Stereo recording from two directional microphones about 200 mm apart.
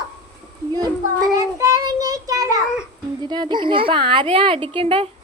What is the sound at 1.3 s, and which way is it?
Child singing, 15° right (ahead or behind).